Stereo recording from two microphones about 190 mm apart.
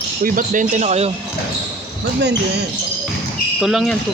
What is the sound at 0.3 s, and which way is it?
Speech, 45° right (ahead or behind).